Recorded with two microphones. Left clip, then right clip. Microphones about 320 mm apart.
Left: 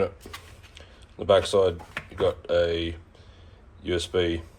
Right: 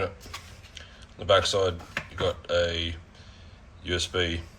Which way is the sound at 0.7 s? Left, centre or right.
Centre.